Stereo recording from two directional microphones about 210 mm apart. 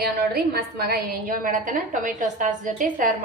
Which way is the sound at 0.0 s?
45° right (ahead or behind).